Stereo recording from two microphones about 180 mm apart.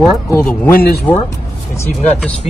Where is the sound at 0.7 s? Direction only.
55° left (ahead or behind).